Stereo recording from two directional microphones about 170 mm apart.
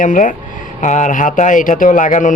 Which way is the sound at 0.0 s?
50° left (ahead or behind).